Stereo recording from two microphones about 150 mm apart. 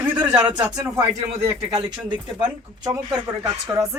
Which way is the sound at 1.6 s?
25° right (ahead or behind).